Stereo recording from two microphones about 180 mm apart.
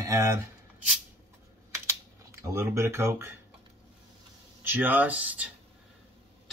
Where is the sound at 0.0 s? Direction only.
15° right (ahead or behind).